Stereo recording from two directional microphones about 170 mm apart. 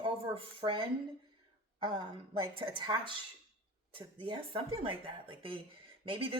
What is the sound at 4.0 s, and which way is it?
A woman's voice, 30° right (ahead or behind).